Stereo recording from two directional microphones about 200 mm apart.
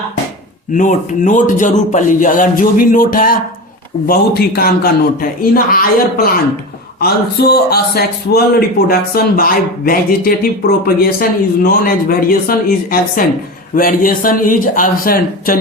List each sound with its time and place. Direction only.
0.7 s a man's voice: 40° left (ahead or behind)